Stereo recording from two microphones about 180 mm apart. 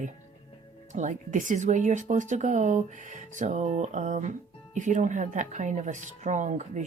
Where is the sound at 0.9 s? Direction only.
45° right (ahead or behind).